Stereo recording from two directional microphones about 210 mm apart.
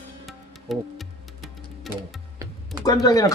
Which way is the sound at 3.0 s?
15° left (ahead or behind).